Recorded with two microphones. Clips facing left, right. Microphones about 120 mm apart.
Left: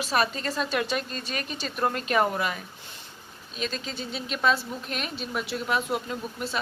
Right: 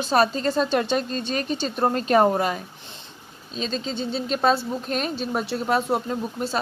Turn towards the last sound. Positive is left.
turn(degrees=-35)  # may be behind; listen again after turning